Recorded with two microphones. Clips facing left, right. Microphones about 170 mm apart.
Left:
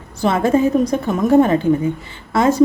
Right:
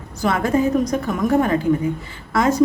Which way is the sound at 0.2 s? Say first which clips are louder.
Left 3 dB; 25° left (ahead or behind).